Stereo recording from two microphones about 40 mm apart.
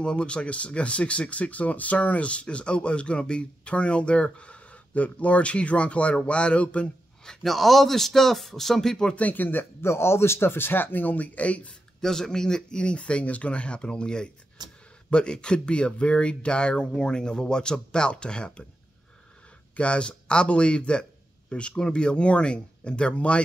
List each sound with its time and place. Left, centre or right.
0.0 s speech: left
7.4 s speech: centre
9.1 s speech: left
12.0 s speech: centre
19.8 s speech: left